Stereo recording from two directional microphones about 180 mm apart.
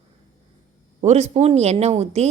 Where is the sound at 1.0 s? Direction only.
40° right (ahead or behind).